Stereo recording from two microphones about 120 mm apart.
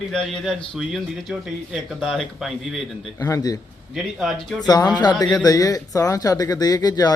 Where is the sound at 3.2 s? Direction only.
30° left (ahead or behind).